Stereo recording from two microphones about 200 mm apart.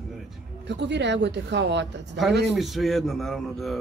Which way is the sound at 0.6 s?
60° right (ahead or behind).